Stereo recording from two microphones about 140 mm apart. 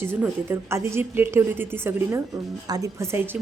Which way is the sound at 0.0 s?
15° right (ahead or behind).